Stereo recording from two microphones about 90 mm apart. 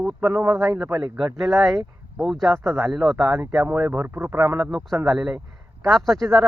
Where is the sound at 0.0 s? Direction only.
5° right (ahead or behind).